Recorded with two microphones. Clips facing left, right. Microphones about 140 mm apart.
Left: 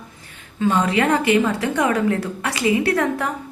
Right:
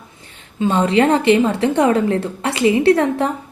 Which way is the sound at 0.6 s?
30° right (ahead or behind).